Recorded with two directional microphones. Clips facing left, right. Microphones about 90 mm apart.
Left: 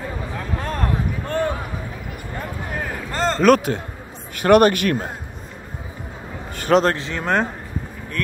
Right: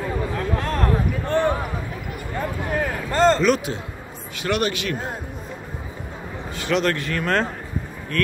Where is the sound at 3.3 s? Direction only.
50° left (ahead or behind).